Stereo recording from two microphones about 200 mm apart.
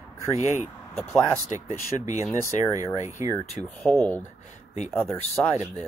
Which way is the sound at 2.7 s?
15° right (ahead or behind).